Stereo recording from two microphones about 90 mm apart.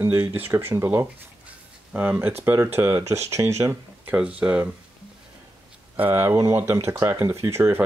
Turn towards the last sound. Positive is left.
turn(degrees=-30)  # may be behind; listen again after turning